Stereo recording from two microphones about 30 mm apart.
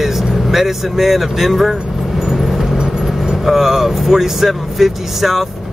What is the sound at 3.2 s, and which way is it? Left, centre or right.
Speech, centre.